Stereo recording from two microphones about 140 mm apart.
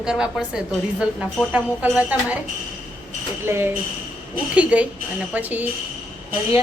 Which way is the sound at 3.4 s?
20° right (ahead or behind).